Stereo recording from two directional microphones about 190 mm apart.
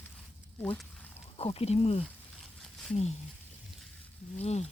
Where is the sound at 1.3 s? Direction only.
30° left (ahead or behind).